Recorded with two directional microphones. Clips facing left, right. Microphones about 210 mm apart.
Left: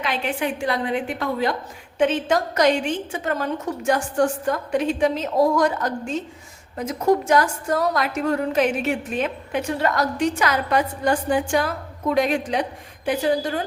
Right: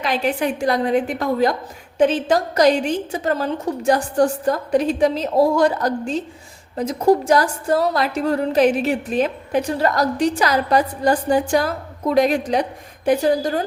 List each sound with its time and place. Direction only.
0.0 s a woman's voice: 40° right (ahead or behind)